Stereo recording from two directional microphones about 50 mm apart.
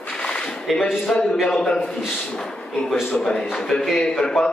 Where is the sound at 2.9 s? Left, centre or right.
Centre.